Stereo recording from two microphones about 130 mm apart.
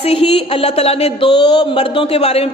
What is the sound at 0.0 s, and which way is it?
Speech, 50° left (ahead or behind).